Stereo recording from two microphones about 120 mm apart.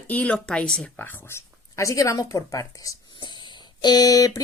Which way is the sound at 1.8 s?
25° left (ahead or behind).